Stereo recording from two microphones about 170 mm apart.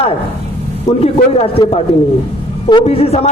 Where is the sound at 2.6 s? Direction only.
30° left (ahead or behind).